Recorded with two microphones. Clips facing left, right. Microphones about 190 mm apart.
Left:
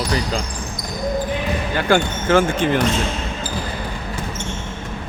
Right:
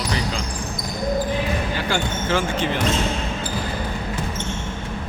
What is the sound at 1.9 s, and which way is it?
Speech, 55° left (ahead or behind).